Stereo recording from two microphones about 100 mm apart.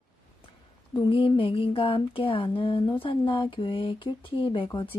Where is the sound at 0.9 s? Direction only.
55° left (ahead or behind).